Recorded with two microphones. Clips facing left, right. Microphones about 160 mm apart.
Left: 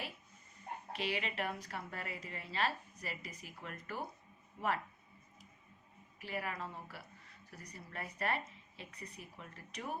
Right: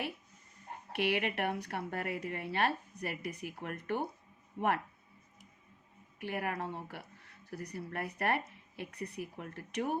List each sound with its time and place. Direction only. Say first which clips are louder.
0.9 s a woman's voice: right 7 dB; 65° right (ahead or behind)
6.1 s a woman's voice: right 5 dB; 60° right (ahead or behind)